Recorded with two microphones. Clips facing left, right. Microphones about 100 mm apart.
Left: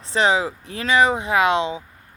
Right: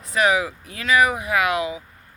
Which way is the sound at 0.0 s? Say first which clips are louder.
Left 1 dB; 30° left (ahead or behind).